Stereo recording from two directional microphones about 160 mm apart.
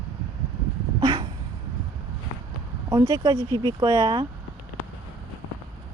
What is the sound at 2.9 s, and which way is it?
Speech, 25° right (ahead or behind).